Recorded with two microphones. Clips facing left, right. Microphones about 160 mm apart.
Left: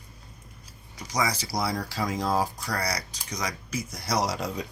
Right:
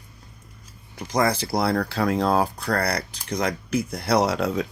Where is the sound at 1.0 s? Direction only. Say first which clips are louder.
Right 6 dB; 55° right (ahead or behind).